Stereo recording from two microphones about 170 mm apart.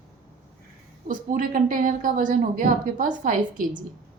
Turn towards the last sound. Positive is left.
turn(degrees=-50)  # may be behind; listen again after turning